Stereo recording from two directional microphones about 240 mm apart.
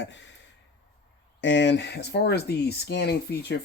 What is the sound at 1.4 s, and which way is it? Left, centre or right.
Speech, left.